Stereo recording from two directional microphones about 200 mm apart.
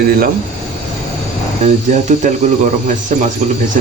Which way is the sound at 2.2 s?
40° right (ahead or behind).